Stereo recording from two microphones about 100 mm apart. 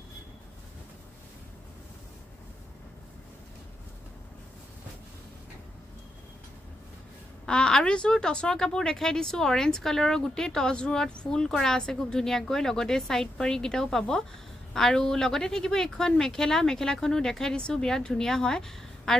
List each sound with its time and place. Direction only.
7.4 s a woman's voice: 10° left (ahead or behind)